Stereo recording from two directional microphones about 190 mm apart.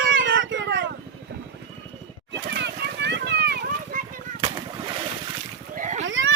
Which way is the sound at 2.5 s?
65° right (ahead or behind).